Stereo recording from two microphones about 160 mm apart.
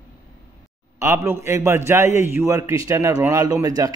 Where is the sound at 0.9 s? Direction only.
15° right (ahead or behind).